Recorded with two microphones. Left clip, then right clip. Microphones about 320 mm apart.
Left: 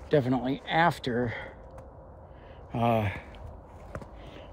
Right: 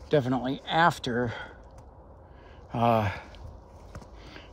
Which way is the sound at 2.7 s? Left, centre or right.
Right.